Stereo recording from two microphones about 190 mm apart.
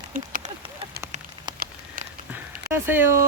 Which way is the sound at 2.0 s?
45° right (ahead or behind).